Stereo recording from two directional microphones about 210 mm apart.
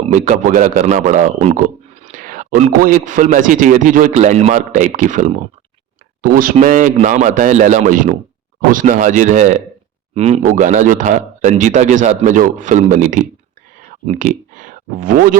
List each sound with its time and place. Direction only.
0.1 s speech: 35° right (ahead or behind)
6.2 s speech: 40° right (ahead or behind)